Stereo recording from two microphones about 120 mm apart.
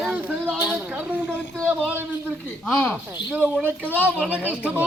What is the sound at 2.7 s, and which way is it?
Speech, 15° left (ahead or behind).